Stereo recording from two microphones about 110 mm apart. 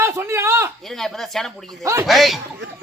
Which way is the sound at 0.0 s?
25° right (ahead or behind).